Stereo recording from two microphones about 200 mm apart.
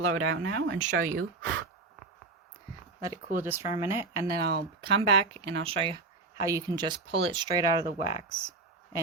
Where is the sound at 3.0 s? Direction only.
15° right (ahead or behind).